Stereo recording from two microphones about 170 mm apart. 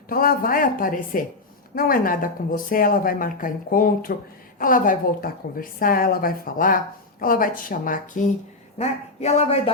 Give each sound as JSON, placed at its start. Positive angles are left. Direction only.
{"t": 0.1, "sound": "speech", "side_deg": 55}
{"t": 8.8, "sound": "speech", "side_deg": 40}